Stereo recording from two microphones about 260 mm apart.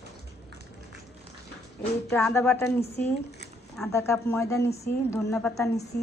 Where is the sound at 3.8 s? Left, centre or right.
Centre.